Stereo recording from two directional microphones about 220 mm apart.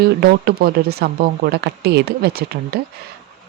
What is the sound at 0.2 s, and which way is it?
Speech, 45° right (ahead or behind).